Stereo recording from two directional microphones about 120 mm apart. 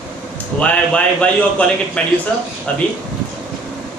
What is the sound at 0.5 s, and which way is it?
A man's voice, 10° left (ahead or behind).